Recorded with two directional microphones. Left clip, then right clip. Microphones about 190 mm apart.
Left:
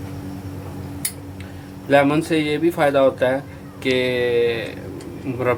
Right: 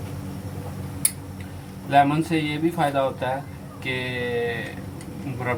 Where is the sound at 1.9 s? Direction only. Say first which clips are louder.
Left 3 dB; 60° left (ahead or behind).